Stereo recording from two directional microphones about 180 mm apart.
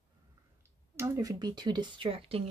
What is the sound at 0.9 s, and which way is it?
Speech, 15° right (ahead or behind).